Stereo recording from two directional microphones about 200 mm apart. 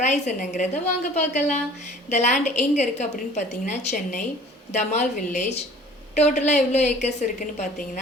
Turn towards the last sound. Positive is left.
turn(degrees=35)  # may be behind; listen again after turning